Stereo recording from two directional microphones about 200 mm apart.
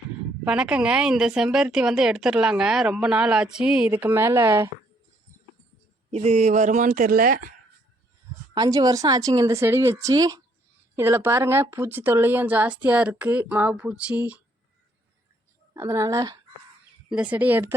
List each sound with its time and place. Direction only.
0.4 s a woman's voice: 5° right (ahead or behind)
6.1 s speech: 30° right (ahead or behind)
8.5 s speech: 20° right (ahead or behind)
15.7 s speech: 15° right (ahead or behind)
17.1 s speech: 5° right (ahead or behind)